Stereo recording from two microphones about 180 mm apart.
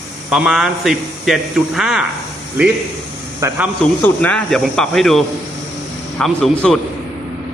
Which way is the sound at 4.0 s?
5° left (ahead or behind).